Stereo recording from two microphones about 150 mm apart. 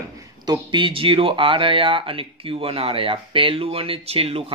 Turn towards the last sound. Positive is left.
turn(degrees=-40)  # may be behind; listen again after turning